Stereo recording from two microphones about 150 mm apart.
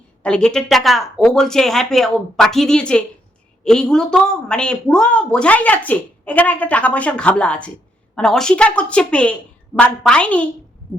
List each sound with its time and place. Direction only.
0.2 s a woman's voice: 5° left (ahead or behind)